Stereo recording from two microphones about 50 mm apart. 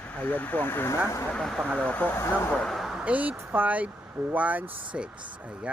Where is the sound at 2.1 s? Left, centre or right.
Left.